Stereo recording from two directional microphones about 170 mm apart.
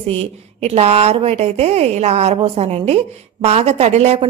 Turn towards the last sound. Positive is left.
turn(degrees=-40)  # may be behind; listen again after turning